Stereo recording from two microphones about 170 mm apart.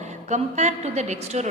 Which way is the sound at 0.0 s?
45° right (ahead or behind).